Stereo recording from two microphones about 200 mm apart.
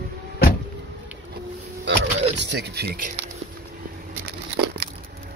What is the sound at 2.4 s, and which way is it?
Speech, 55° right (ahead or behind).